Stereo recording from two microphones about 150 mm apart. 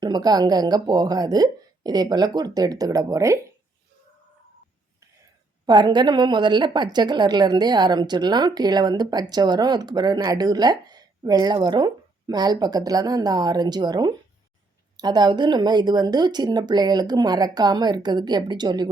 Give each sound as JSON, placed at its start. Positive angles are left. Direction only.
{"t": 0.0, "sound": "speech", "side_deg": -25}
{"t": 5.6, "sound": "speech", "side_deg": -30}